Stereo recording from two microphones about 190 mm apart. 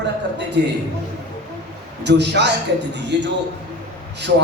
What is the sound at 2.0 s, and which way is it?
A man's voice, 65° right (ahead or behind).